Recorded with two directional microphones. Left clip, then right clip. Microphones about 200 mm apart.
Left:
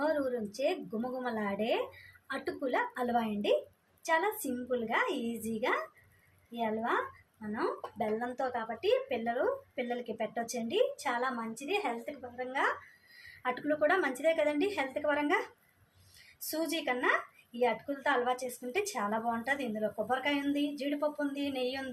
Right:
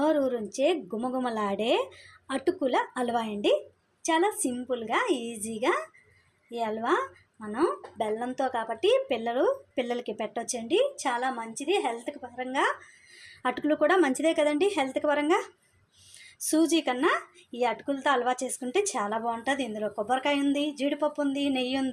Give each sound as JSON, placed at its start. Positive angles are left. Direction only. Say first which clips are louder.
{"t": 0.0, "sound": "a sound", "louder": "right 6 dB", "side_deg": -35}
{"t": 1.2, "sound": "a woman's voice", "louder": "right 5 dB", "side_deg": -35}
{"t": 12.5, "sound": "a woman's voice", "louder": "right 5 dB", "side_deg": -35}
{"t": 16.5, "sound": "a woman's voice", "louder": "right 8 dB", "side_deg": -35}